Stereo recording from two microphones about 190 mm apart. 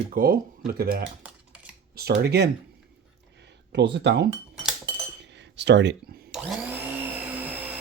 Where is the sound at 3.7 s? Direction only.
65° right (ahead or behind).